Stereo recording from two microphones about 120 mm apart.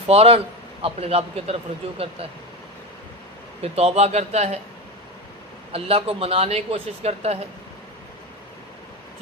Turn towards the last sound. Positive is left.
turn(degrees=-60)  # may be behind; listen again after turning